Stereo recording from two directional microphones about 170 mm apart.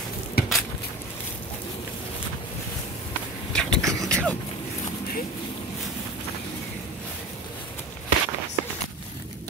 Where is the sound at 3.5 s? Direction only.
5° left (ahead or behind).